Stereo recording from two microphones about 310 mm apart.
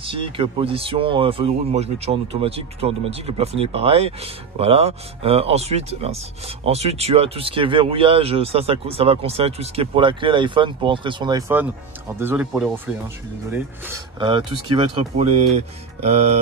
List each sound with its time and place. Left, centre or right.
0.0 s speech: centre